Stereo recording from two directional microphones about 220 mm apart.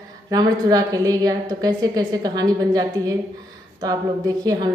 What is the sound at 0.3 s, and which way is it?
A woman's voice, 15° right (ahead or behind).